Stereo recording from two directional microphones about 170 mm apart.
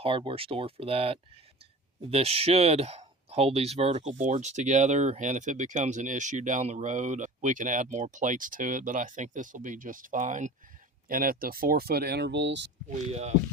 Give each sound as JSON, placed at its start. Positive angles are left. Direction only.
{"t": 0.0, "sound": "speech", "side_deg": -30}
{"t": 11.1, "sound": "speech", "side_deg": -60}
{"t": 12.9, "sound": "speech", "side_deg": -40}